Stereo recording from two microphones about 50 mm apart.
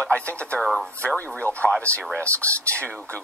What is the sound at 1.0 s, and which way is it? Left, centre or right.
A woman's voice, left.